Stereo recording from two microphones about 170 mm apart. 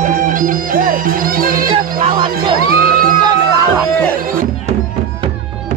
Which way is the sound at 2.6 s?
60° right (ahead or behind).